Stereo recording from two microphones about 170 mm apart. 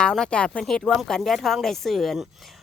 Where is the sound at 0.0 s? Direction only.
5° left (ahead or behind).